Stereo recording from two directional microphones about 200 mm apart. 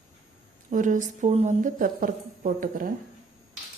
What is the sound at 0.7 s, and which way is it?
Mantra, 40° right (ahead or behind).